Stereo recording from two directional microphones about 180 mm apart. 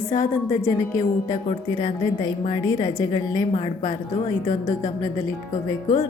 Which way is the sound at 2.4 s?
25° left (ahead or behind).